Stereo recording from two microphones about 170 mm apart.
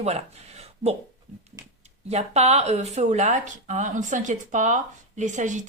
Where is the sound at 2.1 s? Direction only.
40° right (ahead or behind).